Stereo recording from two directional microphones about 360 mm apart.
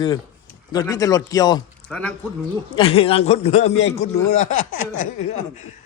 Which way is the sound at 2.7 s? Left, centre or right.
Centre.